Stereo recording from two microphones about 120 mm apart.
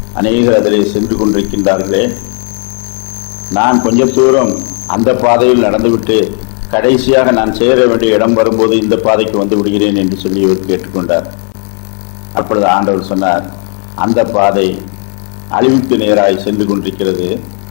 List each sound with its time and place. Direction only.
0.1 s a man's voice: 15° left (ahead or behind)
3.5 s a man's voice: 20° left (ahead or behind)
12.3 s a man's voice: 20° left (ahead or behind)